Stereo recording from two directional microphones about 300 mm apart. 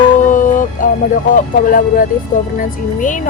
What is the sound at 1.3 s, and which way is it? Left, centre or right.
A woman's voice, left.